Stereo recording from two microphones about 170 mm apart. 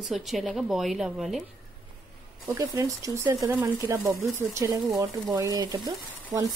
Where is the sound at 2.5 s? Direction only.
20° right (ahead or behind).